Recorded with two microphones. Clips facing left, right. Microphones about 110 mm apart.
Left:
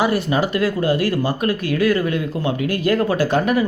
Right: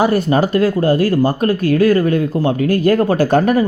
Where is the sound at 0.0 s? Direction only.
40° right (ahead or behind).